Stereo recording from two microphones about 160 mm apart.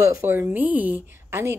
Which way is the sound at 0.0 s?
15° right (ahead or behind).